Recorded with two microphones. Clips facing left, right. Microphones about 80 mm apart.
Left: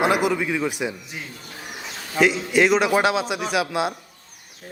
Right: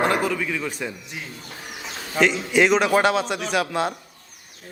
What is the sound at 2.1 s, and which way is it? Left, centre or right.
A man's voice, centre.